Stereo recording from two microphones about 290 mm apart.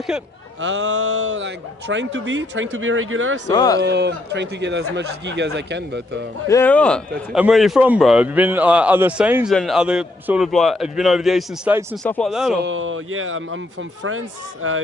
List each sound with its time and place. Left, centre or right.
0.1 s a man's voice: centre
0.6 s a man's voice: right
3.5 s speech: centre
3.8 s a man's voice: right
6.5 s a man's voice: centre
12.6 s speech: right